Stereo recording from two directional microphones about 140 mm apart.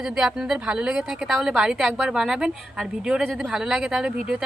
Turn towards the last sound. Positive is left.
turn(degrees=-5)  # may be behind; listen again after turning